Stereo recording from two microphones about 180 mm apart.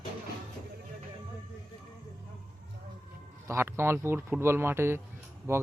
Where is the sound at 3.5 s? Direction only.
15° right (ahead or behind).